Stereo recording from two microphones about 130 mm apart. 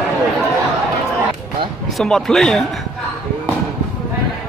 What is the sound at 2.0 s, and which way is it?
Speech, 5° left (ahead or behind).